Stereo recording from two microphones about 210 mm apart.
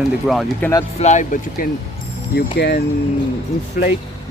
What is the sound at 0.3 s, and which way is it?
Speech, centre (ahead or behind).